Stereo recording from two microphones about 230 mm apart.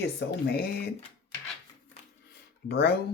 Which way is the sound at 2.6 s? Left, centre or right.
Left.